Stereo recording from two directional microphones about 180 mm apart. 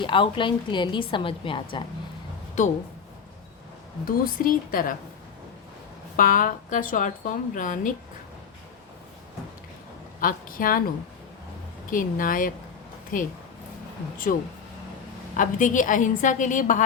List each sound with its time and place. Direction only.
0.0 s a woman's voice: 25° left (ahead or behind)
2.6 s a woman's voice: 45° left (ahead or behind)
4.0 s a woman's voice: 50° left (ahead or behind)
6.1 s a woman's voice: 50° left (ahead or behind)
10.2 s a woman's voice: 50° left (ahead or behind)
11.9 s a woman's voice: 50° left (ahead or behind)
15.4 s a woman's voice: 45° left (ahead or behind)